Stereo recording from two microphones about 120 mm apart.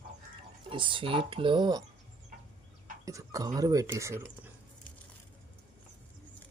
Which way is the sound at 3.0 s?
25° right (ahead or behind).